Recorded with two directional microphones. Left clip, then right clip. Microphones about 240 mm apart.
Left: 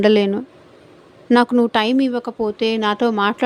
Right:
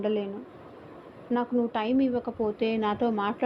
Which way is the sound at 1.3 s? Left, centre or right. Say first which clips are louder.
Left 13 dB; left.